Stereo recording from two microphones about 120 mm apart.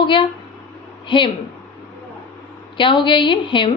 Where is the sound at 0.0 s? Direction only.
45° left (ahead or behind).